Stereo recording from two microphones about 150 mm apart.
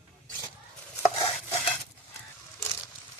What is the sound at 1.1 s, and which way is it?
Stir, 35° left (ahead or behind).